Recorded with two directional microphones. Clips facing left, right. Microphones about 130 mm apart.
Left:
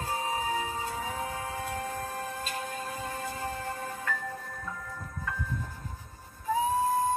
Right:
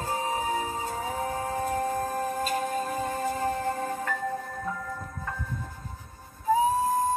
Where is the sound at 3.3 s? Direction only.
40° right (ahead or behind).